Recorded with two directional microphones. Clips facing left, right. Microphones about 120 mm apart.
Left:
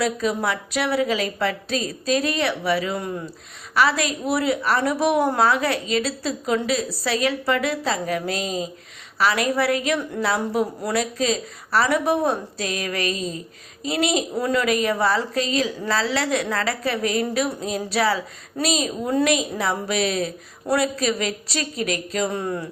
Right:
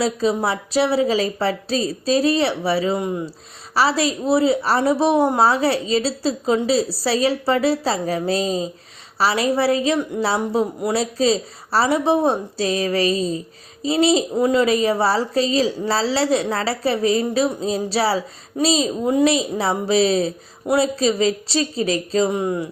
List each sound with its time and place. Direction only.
0.0 s a woman's voice: 30° right (ahead or behind)
3.8 s a woman's voice: 30° right (ahead or behind)
14.3 s a woman's voice: 20° right (ahead or behind)
14.7 s a woman's voice: 30° right (ahead or behind)
22.3 s speech: 15° right (ahead or behind)